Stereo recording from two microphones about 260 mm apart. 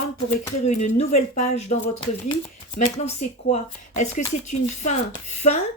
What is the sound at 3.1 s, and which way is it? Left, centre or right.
Speech, left.